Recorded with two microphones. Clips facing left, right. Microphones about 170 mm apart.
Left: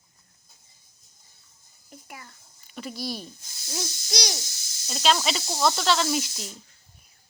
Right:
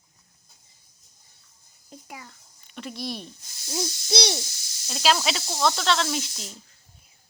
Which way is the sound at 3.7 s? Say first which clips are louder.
Right 5 dB; 30° right (ahead or behind).